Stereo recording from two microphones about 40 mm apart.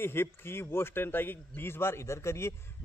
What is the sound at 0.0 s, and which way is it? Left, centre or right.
Speech, left.